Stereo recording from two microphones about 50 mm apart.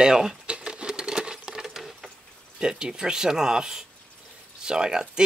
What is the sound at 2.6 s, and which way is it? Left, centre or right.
Speech, centre.